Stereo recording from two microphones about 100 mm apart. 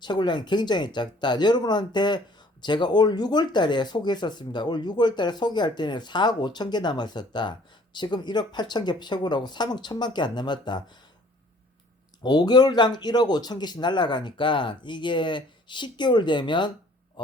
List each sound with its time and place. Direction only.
0.0 s speech: 50° left (ahead or behind)
12.2 s speech: 45° left (ahead or behind)